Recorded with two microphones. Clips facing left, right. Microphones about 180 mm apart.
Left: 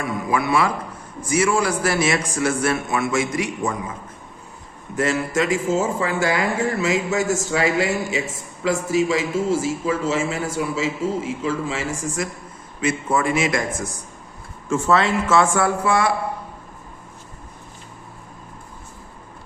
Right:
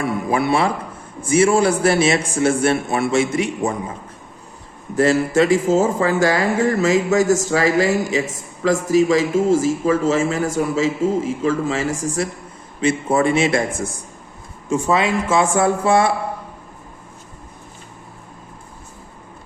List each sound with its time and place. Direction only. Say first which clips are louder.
0.0 s speech: right 3 dB; 30° right (ahead or behind)
4.9 s a man's voice: right 6 dB; 35° right (ahead or behind)
14.7 s speech: right 1 dB; 15° right (ahead or behind)